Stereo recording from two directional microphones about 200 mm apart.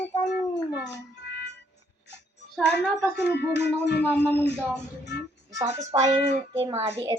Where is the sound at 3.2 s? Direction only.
55° left (ahead or behind).